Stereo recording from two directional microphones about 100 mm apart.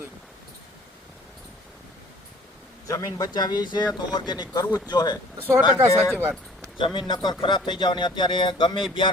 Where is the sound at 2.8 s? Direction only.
35° left (ahead or behind).